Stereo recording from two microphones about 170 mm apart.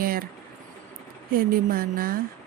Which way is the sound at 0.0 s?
60° right (ahead or behind).